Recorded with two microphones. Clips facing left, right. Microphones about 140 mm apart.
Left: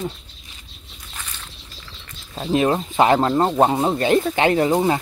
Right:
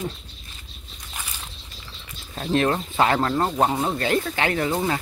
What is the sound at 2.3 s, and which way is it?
Speech, 15° left (ahead or behind).